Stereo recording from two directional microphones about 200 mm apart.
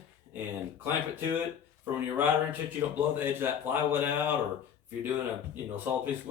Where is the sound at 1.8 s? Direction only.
10° right (ahead or behind).